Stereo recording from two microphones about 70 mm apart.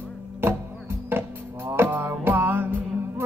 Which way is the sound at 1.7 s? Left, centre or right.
Right.